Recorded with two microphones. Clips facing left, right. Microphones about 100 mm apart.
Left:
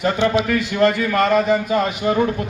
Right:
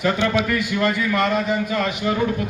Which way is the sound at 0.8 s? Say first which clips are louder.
Left 7 dB; 55° left (ahead or behind).